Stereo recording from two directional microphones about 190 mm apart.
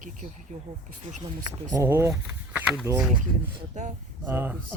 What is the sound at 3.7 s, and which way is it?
Speech, 40° right (ahead or behind).